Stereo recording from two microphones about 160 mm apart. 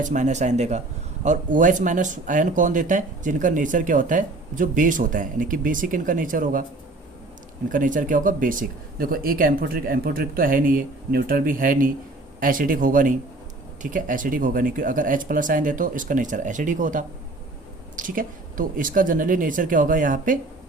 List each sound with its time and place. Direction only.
0.0 s speech: 50° right (ahead or behind)
7.7 s speech: 55° right (ahead or behind)